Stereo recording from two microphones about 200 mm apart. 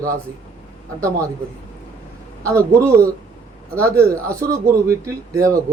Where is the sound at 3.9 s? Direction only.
15° right (ahead or behind).